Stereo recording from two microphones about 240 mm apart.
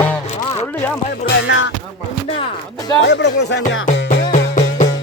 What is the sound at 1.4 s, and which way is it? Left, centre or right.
Speech, left.